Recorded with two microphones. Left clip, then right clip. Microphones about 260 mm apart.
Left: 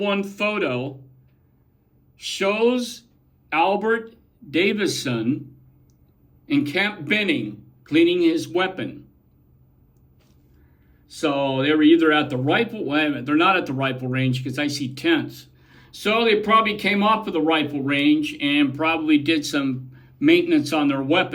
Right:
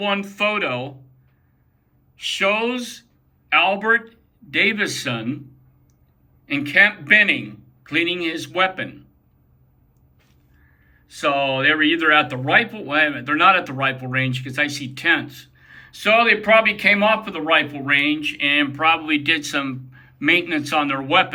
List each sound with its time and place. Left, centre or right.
0.1 s speech: centre
2.1 s speech: centre
6.5 s speech: centre
11.1 s a man's voice: centre